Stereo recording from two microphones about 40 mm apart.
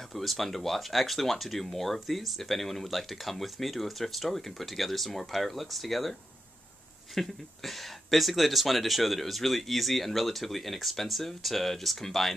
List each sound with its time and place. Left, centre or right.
0.1 s speech: centre
7.2 s speech: centre